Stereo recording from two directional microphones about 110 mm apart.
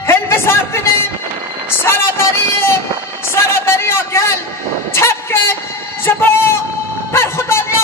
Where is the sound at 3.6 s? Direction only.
20° left (ahead or behind).